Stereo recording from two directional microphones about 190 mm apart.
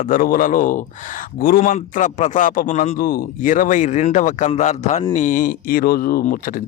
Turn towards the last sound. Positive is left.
turn(degrees=50)  # may be behind; listen again after turning